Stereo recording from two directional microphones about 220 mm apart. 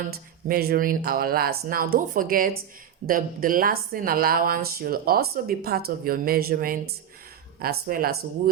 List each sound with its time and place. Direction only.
0.1 s a woman's voice: 45° right (ahead or behind)